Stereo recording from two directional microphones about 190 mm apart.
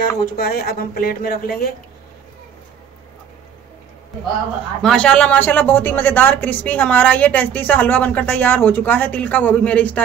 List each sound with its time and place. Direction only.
0.0 s speech: 50° left (ahead or behind)
4.8 s a woman's voice: 5° left (ahead or behind)